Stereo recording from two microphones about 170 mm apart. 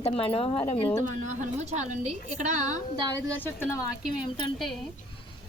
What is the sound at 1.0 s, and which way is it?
A woman's voice, 45° right (ahead or behind).